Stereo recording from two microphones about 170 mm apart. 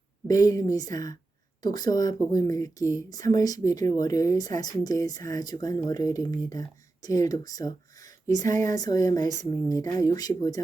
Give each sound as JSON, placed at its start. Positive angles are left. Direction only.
{"t": 0.3, "sound": "speech", "side_deg": 20}
{"t": 8.4, "sound": "speech", "side_deg": -50}
{"t": 8.7, "sound": "speech", "side_deg": 20}